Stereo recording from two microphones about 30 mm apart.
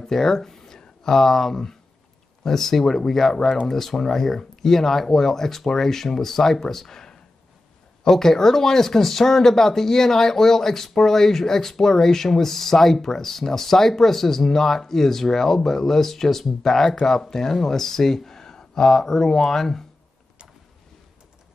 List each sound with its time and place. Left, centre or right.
0.0 s speech: centre